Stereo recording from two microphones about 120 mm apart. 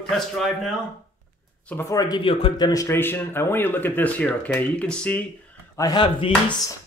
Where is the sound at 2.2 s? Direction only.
45° left (ahead or behind).